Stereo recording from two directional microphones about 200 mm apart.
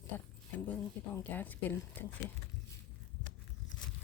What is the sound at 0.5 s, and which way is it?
Speech, 10° left (ahead or behind).